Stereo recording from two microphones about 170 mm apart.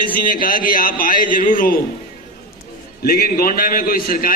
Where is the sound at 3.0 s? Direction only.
60° left (ahead or behind).